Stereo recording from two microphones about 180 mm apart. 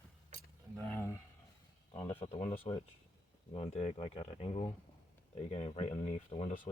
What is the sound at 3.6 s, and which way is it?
Speech, 35° left (ahead or behind).